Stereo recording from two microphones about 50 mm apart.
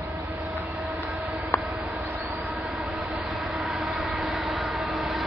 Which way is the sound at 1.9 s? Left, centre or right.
Centre.